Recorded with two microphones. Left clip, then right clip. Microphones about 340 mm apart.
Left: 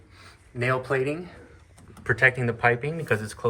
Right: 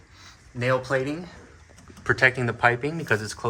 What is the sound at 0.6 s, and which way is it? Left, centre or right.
Speech, centre.